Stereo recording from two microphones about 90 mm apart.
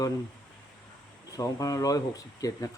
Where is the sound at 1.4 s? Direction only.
40° left (ahead or behind).